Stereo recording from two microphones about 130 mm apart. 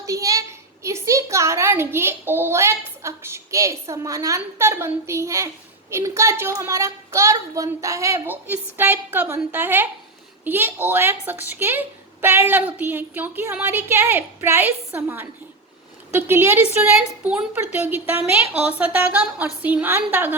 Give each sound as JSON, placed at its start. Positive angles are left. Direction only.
{"t": 0.0, "sound": "a woman's voice", "side_deg": -25}